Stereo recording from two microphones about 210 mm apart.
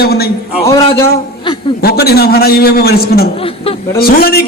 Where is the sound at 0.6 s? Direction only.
15° left (ahead or behind).